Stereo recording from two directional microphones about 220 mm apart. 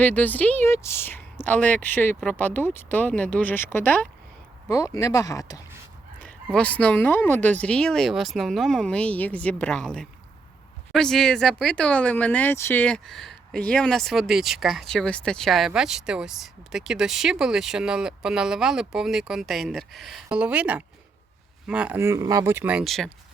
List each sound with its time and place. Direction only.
0.0 s speech: 5° left (ahead or behind)
6.2 s speech: 5° left (ahead or behind)